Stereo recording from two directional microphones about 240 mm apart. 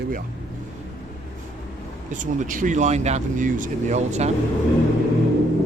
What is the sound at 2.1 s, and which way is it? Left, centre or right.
Speech, right.